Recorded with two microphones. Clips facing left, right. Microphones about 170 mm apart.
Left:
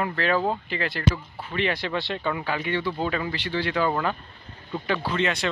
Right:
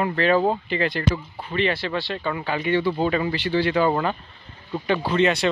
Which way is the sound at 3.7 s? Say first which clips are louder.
Right 2 dB; 20° right (ahead or behind).